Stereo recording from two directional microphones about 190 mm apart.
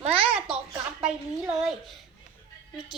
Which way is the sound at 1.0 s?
5° right (ahead or behind).